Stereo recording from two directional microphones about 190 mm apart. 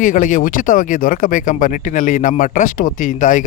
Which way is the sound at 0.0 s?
45° left (ahead or behind).